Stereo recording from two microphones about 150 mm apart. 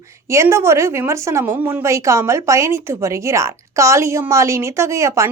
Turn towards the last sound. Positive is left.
turn(degrees=-20)  # may be behind; listen again after turning